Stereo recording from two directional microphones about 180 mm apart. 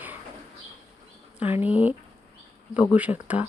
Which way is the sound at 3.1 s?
5° left (ahead or behind).